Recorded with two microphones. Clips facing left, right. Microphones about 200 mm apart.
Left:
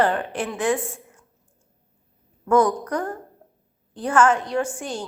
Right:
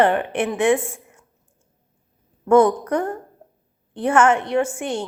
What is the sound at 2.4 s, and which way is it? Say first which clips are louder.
A woman's voice: right 4 dB; 25° right (ahead or behind).